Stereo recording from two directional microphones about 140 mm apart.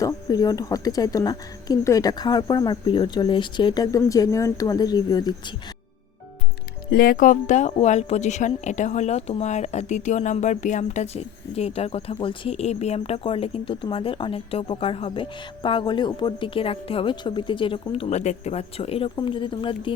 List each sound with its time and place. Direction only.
0.0 s speech: 25° left (ahead or behind)
6.9 s speech: 90° left; by 19.9 s 35° left (ahead or behind)